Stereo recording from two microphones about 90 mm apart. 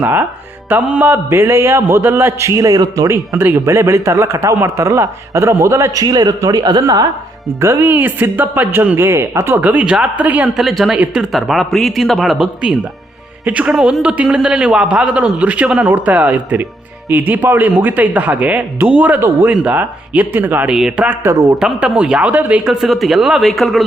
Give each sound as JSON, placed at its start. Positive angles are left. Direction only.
{"t": 0.0, "sound": "speech", "side_deg": -25}
{"t": 2.6, "sound": "a man's voice", "side_deg": -40}
{"t": 7.6, "sound": "speech", "side_deg": -25}
{"t": 9.6, "sound": "a man's voice", "side_deg": -15}
{"t": 10.6, "sound": "speech", "side_deg": -5}
{"t": 13.4, "sound": "a man's voice", "side_deg": -15}
{"t": 20.7, "sound": "speech", "side_deg": -5}